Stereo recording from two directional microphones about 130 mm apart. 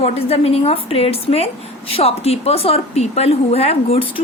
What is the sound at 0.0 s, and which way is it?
Speech, 50° left (ahead or behind).